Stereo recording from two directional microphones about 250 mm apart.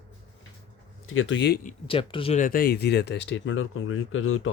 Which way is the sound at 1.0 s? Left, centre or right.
Left.